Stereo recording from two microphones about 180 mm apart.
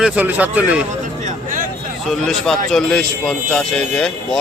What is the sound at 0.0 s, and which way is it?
Speech, 10° right (ahead or behind).